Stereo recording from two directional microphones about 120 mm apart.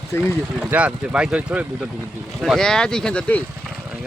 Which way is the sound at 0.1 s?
20° left (ahead or behind).